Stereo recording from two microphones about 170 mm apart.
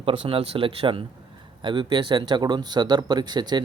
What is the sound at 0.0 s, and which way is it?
Speech, 30° right (ahead or behind).